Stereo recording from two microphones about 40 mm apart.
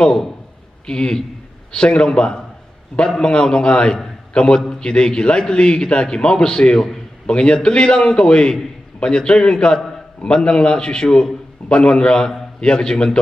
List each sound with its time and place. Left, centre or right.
0.8 s a man's voice: left